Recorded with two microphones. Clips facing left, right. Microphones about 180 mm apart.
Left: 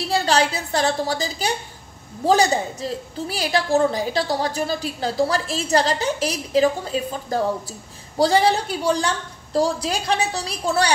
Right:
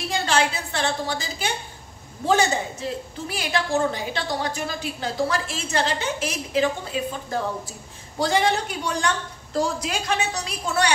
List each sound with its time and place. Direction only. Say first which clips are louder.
0.1 s a woman's voice: left 3 dB; 35° left (ahead or behind)